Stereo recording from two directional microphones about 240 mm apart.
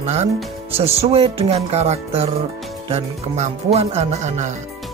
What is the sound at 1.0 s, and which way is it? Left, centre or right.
Music, right.